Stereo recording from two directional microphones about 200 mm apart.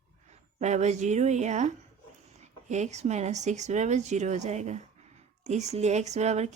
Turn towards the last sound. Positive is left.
turn(degrees=-35)  # may be behind; listen again after turning